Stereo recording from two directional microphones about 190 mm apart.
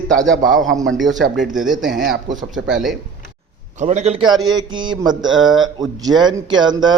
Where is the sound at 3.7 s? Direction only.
35° right (ahead or behind).